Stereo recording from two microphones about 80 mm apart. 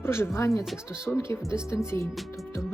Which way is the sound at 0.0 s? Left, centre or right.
Left.